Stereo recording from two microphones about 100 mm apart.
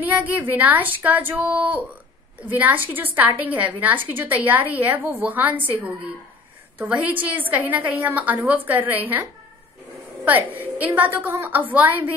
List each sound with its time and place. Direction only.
0.0 s a woman's voice: 15° right (ahead or behind)
10.2 s a woman's voice: 15° right (ahead or behind)